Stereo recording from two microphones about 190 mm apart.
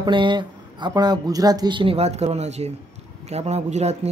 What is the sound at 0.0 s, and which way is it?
Speech, 25° right (ahead or behind).